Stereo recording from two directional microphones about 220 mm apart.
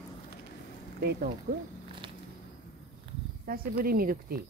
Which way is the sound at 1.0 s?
45° right (ahead or behind).